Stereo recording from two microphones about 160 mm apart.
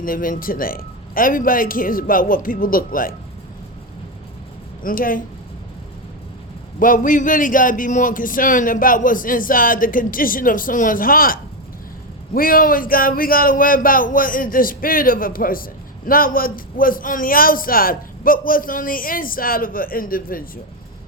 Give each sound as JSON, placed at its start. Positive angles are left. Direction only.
{"t": 0.0, "sound": "speech", "side_deg": 60}
{"t": 4.8, "sound": "speech", "side_deg": 60}
{"t": 6.7, "sound": "speech", "side_deg": 60}